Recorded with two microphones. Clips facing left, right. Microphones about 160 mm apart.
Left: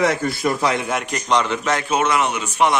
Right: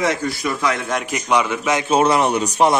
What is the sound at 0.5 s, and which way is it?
Speech, 25° left (ahead or behind).